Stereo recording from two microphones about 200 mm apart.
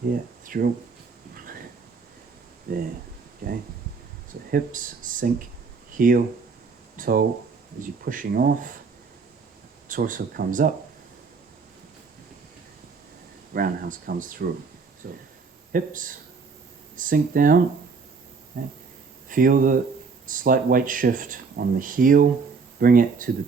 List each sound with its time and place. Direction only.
0.4 s speech: 45° right (ahead or behind)
2.7 s speech: 45° right (ahead or behind)
9.9 s speech: 45° right (ahead or behind)
13.5 s speech: 45° right (ahead or behind)